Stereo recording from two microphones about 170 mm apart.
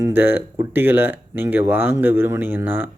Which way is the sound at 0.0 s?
10° right (ahead or behind).